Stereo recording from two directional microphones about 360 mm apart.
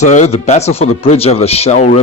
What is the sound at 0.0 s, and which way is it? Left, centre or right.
A man's voice, centre.